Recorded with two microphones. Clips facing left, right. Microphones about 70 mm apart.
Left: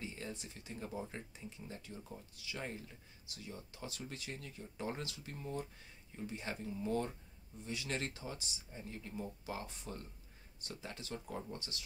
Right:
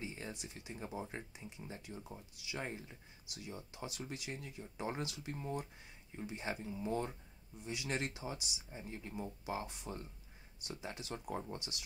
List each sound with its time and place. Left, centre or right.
0.0 s speech: right
1.4 s speech: right
1.9 s speech: centre